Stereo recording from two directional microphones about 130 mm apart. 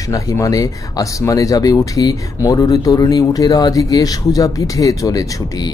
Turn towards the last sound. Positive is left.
turn(degrees=25)  # may be behind; listen again after turning